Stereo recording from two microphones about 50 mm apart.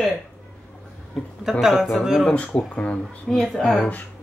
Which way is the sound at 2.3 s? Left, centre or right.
Left.